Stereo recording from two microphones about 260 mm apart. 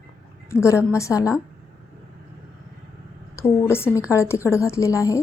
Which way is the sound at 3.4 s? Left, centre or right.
Centre.